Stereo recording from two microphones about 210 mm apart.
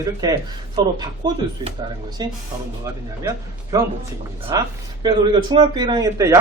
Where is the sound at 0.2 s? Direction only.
20° right (ahead or behind).